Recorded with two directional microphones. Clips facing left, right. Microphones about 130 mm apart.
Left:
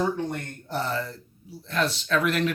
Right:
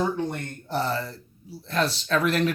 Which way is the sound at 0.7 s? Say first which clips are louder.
Right 2 dB; 35° right (ahead or behind).